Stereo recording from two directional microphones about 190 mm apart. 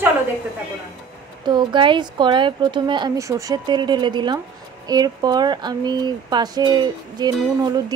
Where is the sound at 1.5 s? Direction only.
25° right (ahead or behind).